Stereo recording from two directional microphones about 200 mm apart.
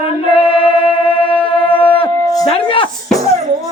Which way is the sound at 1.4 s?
25° left (ahead or behind).